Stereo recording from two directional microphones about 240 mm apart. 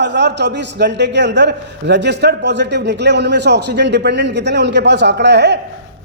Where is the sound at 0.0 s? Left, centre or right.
Right.